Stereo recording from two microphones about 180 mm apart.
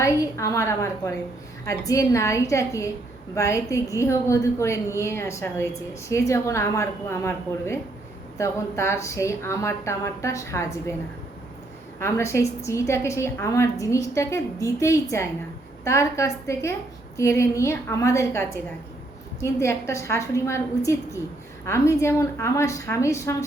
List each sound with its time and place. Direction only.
0.0 s a woman's voice: 15° left (ahead or behind)
11.9 s a woman's voice: 15° left (ahead or behind)